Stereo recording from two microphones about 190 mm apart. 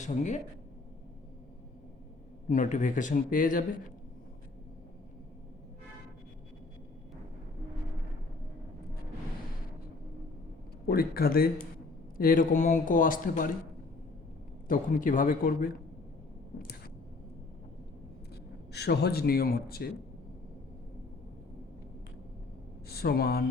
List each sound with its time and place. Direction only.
0.0 s speech: 40° left (ahead or behind)
2.5 s speech: 40° left (ahead or behind)
10.8 s speech: 50° left (ahead or behind)
14.7 s speech: 45° left (ahead or behind)
18.7 s speech: 60° left (ahead or behind)
22.9 s speech: 55° left (ahead or behind)